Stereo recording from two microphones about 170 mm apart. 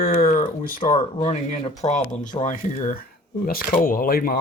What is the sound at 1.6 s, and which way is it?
Speech, 40° left (ahead or behind).